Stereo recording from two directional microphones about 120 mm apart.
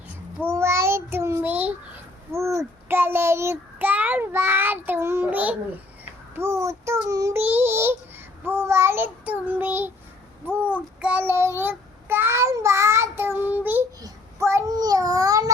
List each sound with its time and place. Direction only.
0.3 s child singing: 20° right (ahead or behind)
2.3 s a child's voice: 25° right (ahead or behind)
6.3 s a sound: 20° right (ahead or behind)
7.1 s child singing: 30° right (ahead or behind)
10.4 s a sound: 15° right (ahead or behind)
11.0 s child singing: 15° right (ahead or behind)
14.0 s babbling: 25° right (ahead or behind)